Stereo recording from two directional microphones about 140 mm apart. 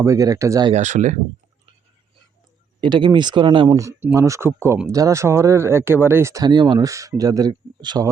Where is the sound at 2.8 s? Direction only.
35° right (ahead or behind).